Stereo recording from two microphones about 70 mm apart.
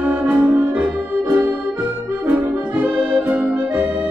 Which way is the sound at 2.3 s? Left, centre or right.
Right.